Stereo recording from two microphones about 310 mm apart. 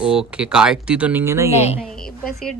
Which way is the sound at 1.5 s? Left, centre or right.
Centre.